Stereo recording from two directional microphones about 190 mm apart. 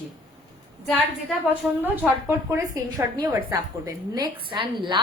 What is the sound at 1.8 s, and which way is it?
A woman's voice, 10° right (ahead or behind).